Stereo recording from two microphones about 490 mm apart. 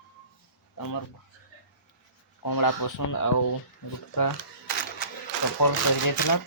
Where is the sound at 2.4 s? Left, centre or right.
Left.